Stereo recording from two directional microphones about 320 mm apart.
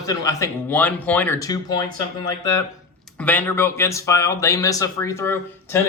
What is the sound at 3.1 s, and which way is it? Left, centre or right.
Speech, centre.